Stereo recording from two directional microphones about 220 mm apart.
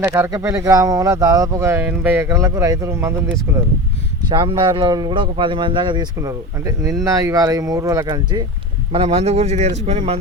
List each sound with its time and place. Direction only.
0.0 s speech: 10° right (ahead or behind)
4.3 s speech: 20° right (ahead or behind)